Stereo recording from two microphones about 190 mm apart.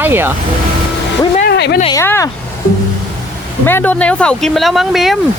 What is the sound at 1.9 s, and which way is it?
Speech, 15° left (ahead or behind).